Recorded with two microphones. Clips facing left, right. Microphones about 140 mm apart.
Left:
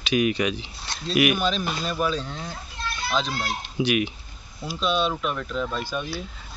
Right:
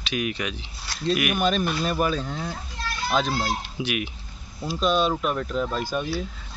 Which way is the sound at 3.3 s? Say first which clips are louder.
Right 3 dB; 35° right (ahead or behind).